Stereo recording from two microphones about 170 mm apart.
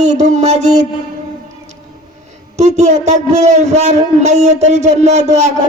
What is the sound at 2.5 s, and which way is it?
A man's voice, 40° right (ahead or behind).